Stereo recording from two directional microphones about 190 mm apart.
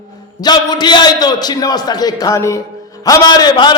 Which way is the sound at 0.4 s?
20° left (ahead or behind).